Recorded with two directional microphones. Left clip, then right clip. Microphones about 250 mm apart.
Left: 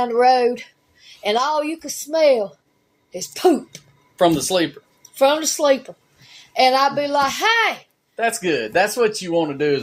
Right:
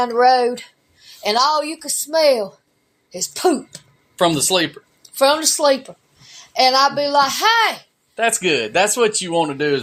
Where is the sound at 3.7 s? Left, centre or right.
Right.